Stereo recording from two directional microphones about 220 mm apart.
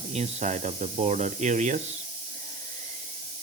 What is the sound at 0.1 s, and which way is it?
Speech, 30° right (ahead or behind).